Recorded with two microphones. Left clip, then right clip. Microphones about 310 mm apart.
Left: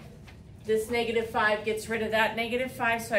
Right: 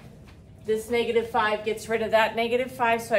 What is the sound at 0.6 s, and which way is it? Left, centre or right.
A woman's voice, centre.